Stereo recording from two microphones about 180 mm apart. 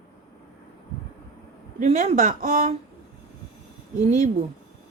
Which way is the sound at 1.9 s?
35° right (ahead or behind).